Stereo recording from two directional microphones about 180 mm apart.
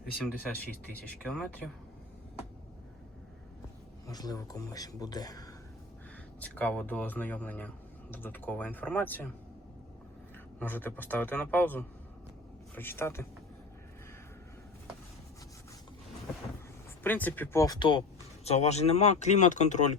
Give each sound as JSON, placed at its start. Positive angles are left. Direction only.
{"t": 0.9, "sound": "speech", "side_deg": 5}
{"t": 4.0, "sound": "speech", "side_deg": 20}
{"t": 6.4, "sound": "speech", "side_deg": 10}
{"t": 10.6, "sound": "speech", "side_deg": 10}
{"t": 17.0, "sound": "speech", "side_deg": 10}
{"t": 18.4, "sound": "speech", "side_deg": 40}